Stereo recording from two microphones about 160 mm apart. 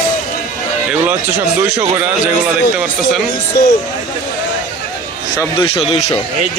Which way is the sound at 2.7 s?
5° right (ahead or behind).